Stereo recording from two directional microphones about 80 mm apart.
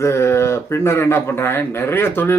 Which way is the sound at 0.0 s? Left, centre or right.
Left.